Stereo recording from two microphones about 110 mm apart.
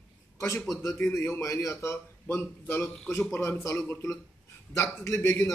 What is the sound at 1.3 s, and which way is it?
Speech, 25° left (ahead or behind).